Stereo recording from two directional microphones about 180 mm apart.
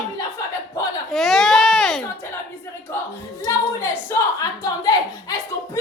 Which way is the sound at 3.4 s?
15° left (ahead or behind).